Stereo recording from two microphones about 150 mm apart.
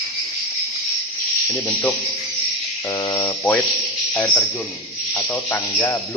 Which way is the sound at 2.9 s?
25° left (ahead or behind).